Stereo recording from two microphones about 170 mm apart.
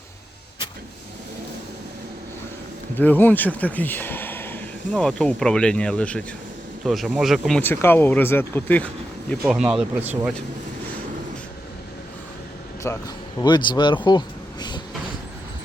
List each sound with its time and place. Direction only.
3.0 s speech: 10° left (ahead or behind)
9.4 s speech: 5° right (ahead or behind)
12.9 s speech: 15° left (ahead or behind)
13.4 s speech: 25° left (ahead or behind)